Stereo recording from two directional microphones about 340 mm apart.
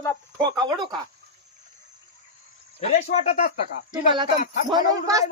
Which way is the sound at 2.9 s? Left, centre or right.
Centre.